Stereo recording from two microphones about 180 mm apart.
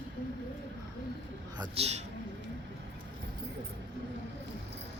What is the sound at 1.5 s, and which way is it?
Speech, 25° right (ahead or behind).